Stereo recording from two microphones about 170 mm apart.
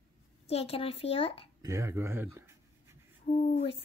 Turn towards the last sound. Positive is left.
turn(degrees=45)  # may be behind; listen again after turning